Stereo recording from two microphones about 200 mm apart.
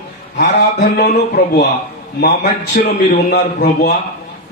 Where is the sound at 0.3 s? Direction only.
55° left (ahead or behind).